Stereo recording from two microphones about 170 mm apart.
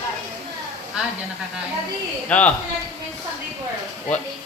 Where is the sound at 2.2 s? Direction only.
10° left (ahead or behind).